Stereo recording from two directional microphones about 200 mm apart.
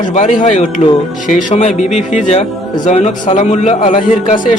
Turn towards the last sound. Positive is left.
turn(degrees=30)  # may be behind; listen again after turning